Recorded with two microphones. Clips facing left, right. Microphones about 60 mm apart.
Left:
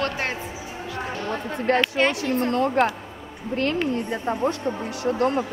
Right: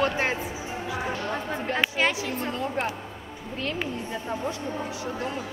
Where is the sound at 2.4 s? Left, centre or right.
Left.